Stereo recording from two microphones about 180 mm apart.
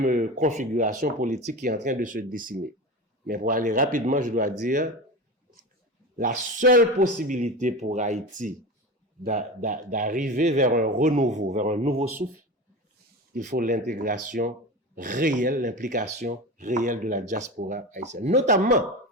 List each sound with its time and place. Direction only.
0.0 s speech: 45° right (ahead or behind)
6.1 s speech: 50° right (ahead or behind)
13.3 s speech: 45° right (ahead or behind)